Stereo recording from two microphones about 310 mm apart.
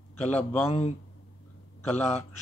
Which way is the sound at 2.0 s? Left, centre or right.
Left.